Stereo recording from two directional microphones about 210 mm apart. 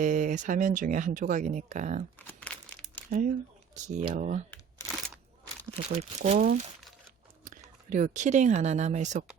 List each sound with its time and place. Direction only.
0.0 s speech: 40° right (ahead or behind)
2.1 s crumpling: 5° left (ahead or behind)
3.8 s speech: 35° right (ahead or behind)
4.5 s a sound: 5° left (ahead or behind)
5.7 s speech: 30° right (ahead or behind)